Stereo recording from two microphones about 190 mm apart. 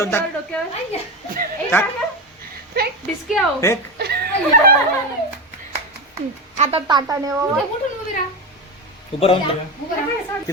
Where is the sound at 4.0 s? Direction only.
55° right (ahead or behind).